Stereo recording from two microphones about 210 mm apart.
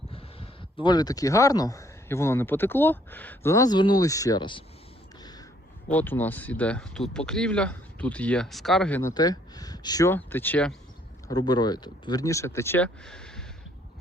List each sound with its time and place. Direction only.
0.8 s speech: 20° left (ahead or behind)
5.9 s speech: 10° left (ahead or behind)
11.3 s speech: 20° left (ahead or behind); by 13.4 s 5° left (ahead or behind)